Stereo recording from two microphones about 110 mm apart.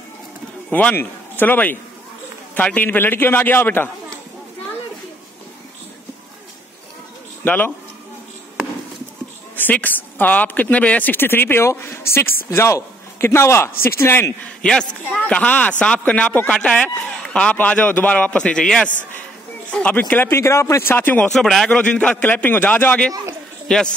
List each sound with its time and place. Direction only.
0.7 s a man's voice: 15° left (ahead or behind)
7.4 s a man's voice: 15° left (ahead or behind)
9.6 s speech: 15° left (ahead or behind)
14.6 s a man's voice: 10° left (ahead or behind)
21.3 s a man's voice: centre (ahead or behind)